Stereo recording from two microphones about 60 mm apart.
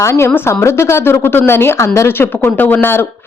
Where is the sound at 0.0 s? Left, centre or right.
Left.